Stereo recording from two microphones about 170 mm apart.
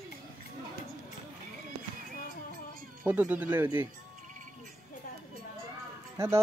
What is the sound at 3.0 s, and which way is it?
Speech, 10° right (ahead or behind).